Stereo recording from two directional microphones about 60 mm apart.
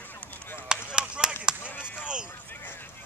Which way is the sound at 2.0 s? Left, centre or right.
Centre.